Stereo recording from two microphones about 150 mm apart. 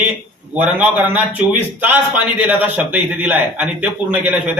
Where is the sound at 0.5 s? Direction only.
10° right (ahead or behind).